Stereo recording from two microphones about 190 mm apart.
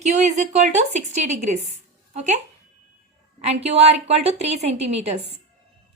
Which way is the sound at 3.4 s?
35° right (ahead or behind).